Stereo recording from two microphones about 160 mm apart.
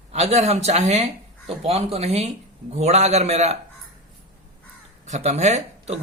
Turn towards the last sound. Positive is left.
turn(degrees=-45)  # may be behind; listen again after turning